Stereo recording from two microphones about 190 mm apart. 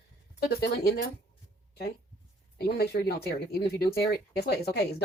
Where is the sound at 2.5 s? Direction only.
55° left (ahead or behind).